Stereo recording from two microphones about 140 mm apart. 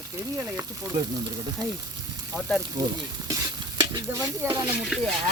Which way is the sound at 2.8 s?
30° right (ahead or behind).